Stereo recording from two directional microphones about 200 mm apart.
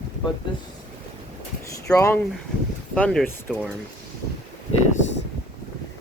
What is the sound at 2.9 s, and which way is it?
Speech, 5° left (ahead or behind).